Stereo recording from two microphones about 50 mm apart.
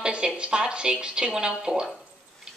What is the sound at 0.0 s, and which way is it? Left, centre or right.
Speech, centre.